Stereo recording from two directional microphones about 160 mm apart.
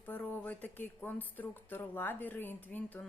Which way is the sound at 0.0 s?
10° left (ahead or behind).